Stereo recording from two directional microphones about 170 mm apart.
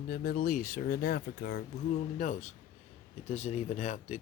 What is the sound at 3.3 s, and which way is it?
Speech, 40° left (ahead or behind).